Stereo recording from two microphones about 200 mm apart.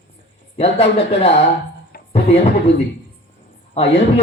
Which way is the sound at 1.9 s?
50° left (ahead or behind).